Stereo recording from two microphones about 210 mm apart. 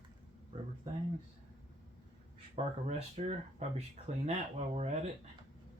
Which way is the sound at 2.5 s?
30° right (ahead or behind).